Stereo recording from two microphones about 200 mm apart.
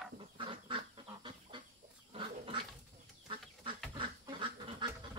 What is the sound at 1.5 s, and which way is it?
Fowl, 25° right (ahead or behind).